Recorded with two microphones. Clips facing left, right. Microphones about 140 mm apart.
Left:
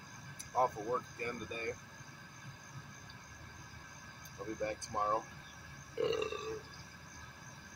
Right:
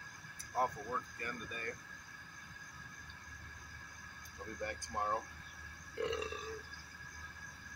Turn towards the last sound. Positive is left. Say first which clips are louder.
# left 4 dB
turn(degrees=20)  # may be behind; listen again after turning